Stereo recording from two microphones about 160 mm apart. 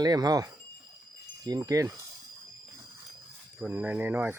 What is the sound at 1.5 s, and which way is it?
Speech, 20° right (ahead or behind).